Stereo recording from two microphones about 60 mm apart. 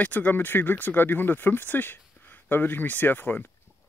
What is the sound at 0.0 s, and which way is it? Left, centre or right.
Speech, left.